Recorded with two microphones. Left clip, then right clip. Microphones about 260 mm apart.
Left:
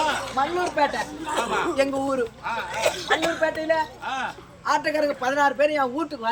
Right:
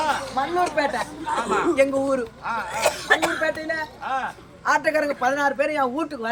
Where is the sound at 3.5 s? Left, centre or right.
Centre.